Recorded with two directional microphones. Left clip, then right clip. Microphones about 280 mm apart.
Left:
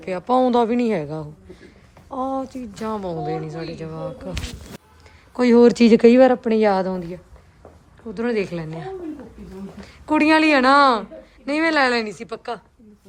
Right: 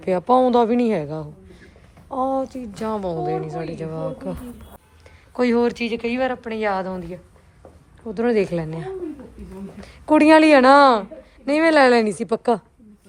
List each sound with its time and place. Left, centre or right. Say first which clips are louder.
0.0 s a man's voice: right 2 dB; centre
5.6 s speech: left 10 dB; left; by 7.2 s centre
8.0 s a woman's voice: right 3 dB; centre